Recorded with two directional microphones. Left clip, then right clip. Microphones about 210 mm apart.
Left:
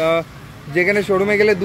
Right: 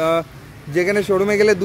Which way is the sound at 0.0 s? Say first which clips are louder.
Left 1 dB; 20° right (ahead or behind).